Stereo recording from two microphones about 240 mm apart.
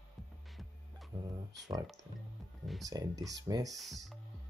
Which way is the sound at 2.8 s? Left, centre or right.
Centre.